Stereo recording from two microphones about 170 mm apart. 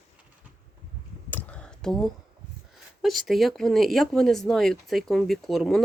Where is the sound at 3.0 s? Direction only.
Centre (ahead or behind).